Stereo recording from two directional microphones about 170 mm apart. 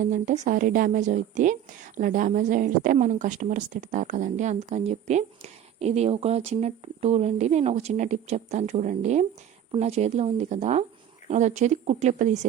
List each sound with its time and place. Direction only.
0.0 s a woman's voice: 45° right (ahead or behind)